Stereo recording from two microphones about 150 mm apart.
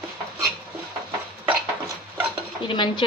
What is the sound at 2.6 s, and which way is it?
Stir, 30° left (ahead or behind).